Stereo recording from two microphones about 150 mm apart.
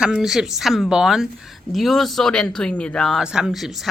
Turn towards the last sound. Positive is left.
turn(degrees=0)  # may be behind; listen again after turning